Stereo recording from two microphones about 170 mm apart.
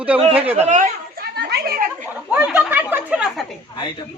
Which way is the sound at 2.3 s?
10° right (ahead or behind).